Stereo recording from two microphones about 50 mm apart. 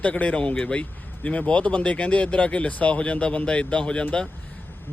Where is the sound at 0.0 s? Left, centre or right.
Left.